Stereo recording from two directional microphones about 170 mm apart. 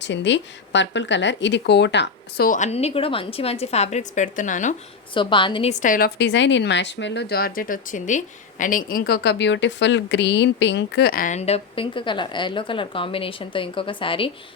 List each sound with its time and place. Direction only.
0.0 s speech: 90° left
2.5 s a woman's voice: 40° left (ahead or behind)
5.1 s a woman's voice: 30° left (ahead or behind)
5.8 s a woman's voice: 50° left (ahead or behind)
6.1 s speech: 90° left; by 14.3 s 30° left (ahead or behind)